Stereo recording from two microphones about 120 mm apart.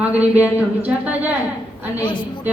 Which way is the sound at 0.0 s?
10° right (ahead or behind).